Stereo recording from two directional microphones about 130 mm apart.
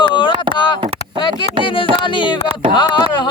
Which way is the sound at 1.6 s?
40° left (ahead or behind).